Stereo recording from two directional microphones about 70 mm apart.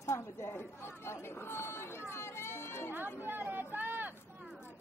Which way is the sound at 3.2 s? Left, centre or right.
Right.